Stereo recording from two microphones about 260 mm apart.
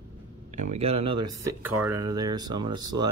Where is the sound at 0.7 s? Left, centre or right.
Right.